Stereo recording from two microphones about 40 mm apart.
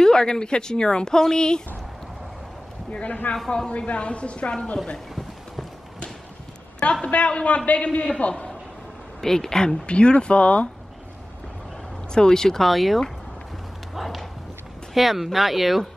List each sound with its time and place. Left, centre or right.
0.0 s speech: centre
2.9 s a man's voice: left
3.4 s speech: centre
3.7 s a man's voice: left
6.8 s a man's voice: left
9.2 s speech: centre
9.8 s a man's voice: left
12.1 s speech: centre
12.6 s speech: centre